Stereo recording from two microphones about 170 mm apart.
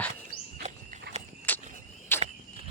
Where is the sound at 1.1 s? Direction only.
75° right (ahead or behind).